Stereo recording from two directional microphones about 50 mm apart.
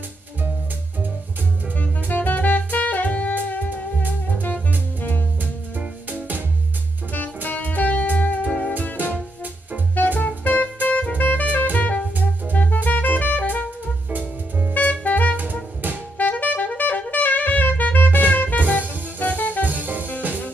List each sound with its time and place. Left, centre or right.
1.8 s music: left
5.4 s music: right
7.1 s music: left
8.5 s music: centre
10.1 s music: left
11.7 s drum kit: left
12.5 s music: left
14.7 s music: left
16.2 s saxophone: left
19.6 s music: right